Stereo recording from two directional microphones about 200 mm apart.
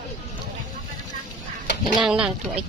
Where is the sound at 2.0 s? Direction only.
5° right (ahead or behind).